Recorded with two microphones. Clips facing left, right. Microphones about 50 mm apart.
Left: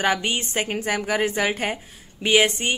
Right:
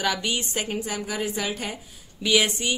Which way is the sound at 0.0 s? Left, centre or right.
Left.